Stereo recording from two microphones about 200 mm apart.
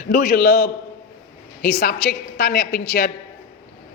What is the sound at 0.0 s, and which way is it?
A man's voice, 40° left (ahead or behind).